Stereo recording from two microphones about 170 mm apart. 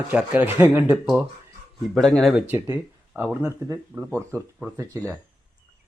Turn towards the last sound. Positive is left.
turn(degrees=-20)  # may be behind; listen again after turning